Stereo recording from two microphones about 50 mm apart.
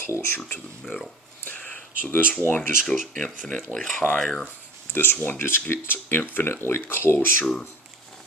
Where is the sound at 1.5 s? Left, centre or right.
Left.